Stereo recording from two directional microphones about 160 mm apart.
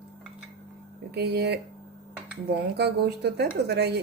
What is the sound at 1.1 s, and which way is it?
Speech, 85° right.